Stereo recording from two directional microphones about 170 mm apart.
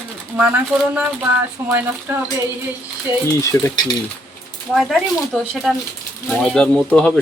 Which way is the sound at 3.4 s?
20° left (ahead or behind).